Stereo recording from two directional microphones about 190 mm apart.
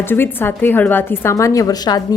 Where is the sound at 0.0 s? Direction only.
10° left (ahead or behind).